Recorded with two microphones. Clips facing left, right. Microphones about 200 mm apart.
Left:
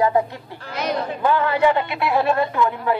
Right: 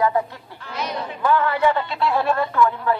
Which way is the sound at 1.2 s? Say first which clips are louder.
Even; 20° left (ahead or behind).